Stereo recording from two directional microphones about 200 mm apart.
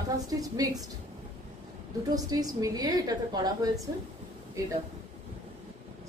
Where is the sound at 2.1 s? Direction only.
20° right (ahead or behind).